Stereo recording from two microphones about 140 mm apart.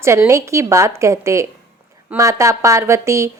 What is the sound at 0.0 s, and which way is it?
A woman's voice, 20° right (ahead or behind).